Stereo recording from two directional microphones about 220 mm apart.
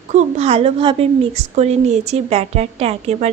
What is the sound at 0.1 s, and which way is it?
A woman's voice, 30° right (ahead or behind).